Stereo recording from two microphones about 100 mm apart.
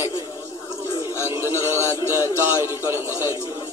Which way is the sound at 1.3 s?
30° right (ahead or behind).